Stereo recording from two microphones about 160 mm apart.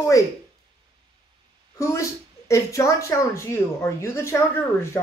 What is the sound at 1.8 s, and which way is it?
Speech, 20° left (ahead or behind).